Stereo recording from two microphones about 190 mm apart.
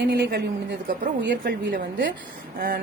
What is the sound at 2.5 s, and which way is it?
Speech, 50° right (ahead or behind).